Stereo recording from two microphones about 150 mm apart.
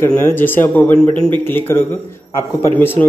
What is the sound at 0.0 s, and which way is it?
A man's voice, 15° left (ahead or behind).